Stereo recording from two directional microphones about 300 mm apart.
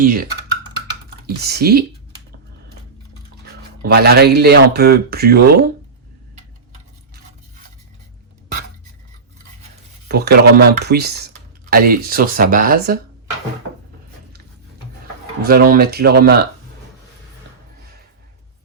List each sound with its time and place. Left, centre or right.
0.0 s speech: right
1.4 s speech: right
3.4 s speech: right
10.1 s speech: right
15.4 s speech: right